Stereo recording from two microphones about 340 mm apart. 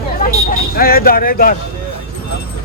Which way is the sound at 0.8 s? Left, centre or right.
Left.